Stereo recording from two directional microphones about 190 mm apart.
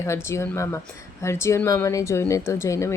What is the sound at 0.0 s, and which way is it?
A woman's voice, 15° left (ahead or behind).